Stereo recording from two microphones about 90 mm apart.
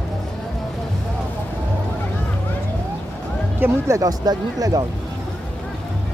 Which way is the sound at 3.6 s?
30° right (ahead or behind).